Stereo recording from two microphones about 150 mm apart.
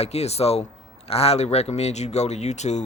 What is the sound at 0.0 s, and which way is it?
Speech, 45° left (ahead or behind).